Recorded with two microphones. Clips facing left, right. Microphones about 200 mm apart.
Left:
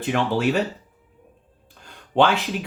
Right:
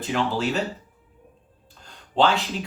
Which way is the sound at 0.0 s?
55° left (ahead or behind).